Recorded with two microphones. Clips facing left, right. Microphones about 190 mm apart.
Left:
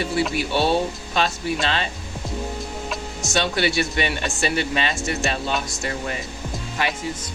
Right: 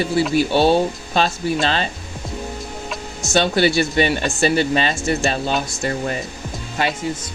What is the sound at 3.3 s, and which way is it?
Speech, 35° right (ahead or behind).